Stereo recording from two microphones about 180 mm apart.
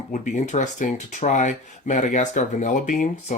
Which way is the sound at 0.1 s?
40° left (ahead or behind).